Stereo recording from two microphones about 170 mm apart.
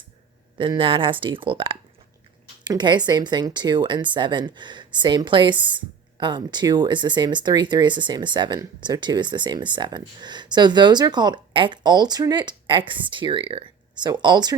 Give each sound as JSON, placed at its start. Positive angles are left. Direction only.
{"t": 0.6, "sound": "speech", "side_deg": -30}